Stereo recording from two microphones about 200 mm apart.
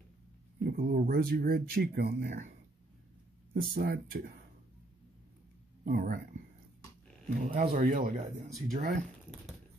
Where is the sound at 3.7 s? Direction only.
50° right (ahead or behind).